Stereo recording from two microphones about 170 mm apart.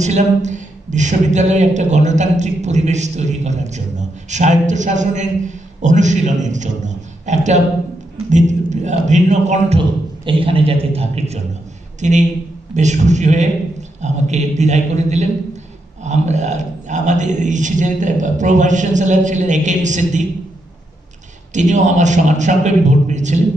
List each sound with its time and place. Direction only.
0.0 s speech: 45° right (ahead or behind)
9.8 s a man's voice: 30° right (ahead or behind); by 20.2 s 45° right (ahead or behind)
21.5 s speech: 45° right (ahead or behind)